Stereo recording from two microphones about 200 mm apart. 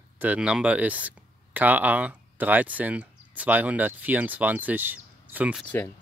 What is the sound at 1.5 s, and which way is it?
Speech, 10° right (ahead or behind).